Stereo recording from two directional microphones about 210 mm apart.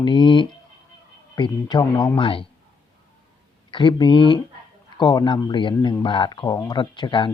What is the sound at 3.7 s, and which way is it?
Speech, 20° left (ahead or behind).